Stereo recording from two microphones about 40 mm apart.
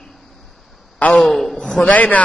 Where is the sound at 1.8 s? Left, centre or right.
Left.